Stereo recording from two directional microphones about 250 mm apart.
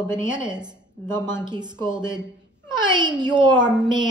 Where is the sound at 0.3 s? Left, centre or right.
Centre.